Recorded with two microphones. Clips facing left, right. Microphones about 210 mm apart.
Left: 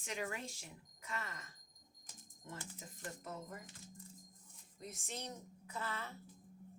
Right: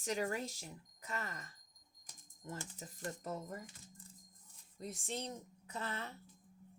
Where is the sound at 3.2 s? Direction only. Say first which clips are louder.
Right 4 dB; 40° right (ahead or behind).